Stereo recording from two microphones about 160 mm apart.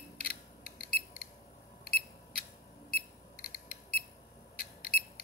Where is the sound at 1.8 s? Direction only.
70° left (ahead or behind).